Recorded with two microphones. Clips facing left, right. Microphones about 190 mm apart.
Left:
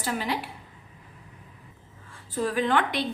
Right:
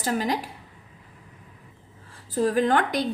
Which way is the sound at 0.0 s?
40° right (ahead or behind).